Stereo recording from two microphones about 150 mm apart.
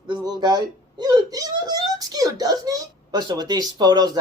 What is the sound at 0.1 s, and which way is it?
Speech, 30° right (ahead or behind).